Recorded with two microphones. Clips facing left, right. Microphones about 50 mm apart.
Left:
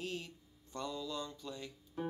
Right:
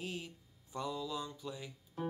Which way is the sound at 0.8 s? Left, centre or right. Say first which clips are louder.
Right 2 dB; centre.